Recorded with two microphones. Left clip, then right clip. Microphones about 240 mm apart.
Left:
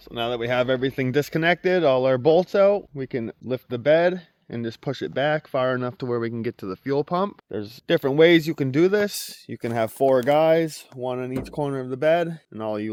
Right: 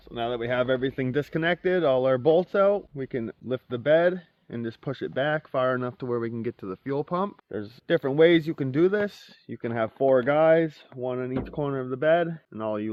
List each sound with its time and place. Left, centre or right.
0.1 s speech: left